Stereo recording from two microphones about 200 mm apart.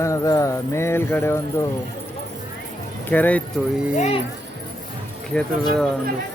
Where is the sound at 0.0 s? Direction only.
15° left (ahead or behind).